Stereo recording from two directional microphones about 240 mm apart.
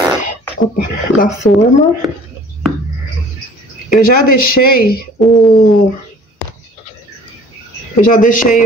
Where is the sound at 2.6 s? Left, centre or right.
Centre.